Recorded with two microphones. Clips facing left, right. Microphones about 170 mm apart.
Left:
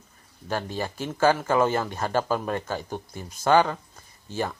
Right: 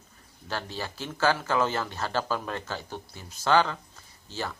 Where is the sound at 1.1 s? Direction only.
15° left (ahead or behind).